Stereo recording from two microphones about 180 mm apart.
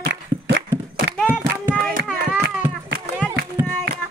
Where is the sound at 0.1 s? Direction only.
75° right (ahead or behind).